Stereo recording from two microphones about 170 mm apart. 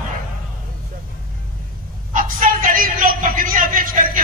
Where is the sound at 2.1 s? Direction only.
50° right (ahead or behind).